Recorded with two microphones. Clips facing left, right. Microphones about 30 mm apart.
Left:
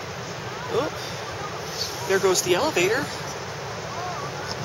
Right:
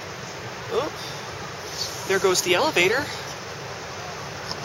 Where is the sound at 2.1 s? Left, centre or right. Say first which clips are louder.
Even; centre.